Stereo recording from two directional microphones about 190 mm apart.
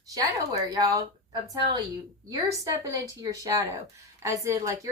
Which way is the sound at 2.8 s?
20° right (ahead or behind).